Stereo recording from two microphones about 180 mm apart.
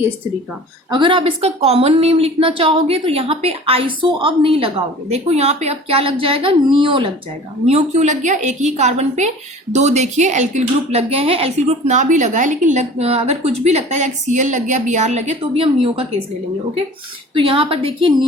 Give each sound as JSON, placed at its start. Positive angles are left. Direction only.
{"t": 0.9, "sound": "a woman's voice", "side_deg": -25}
{"t": 7.7, "sound": "a woman's voice", "side_deg": -40}
{"t": 17.3, "sound": "a woman's voice", "side_deg": -30}